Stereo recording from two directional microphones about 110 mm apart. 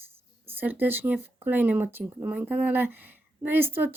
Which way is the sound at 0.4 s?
15° right (ahead or behind).